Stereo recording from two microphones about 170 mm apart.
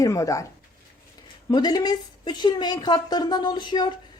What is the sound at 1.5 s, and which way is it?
A woman's voice, 25° left (ahead or behind).